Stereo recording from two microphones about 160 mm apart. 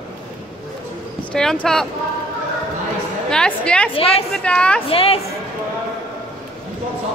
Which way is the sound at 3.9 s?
40° left (ahead or behind).